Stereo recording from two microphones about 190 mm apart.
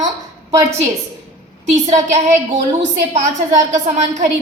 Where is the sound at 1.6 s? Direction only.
40° right (ahead or behind).